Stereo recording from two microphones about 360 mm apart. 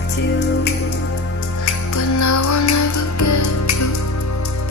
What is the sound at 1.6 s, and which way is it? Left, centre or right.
Music, left.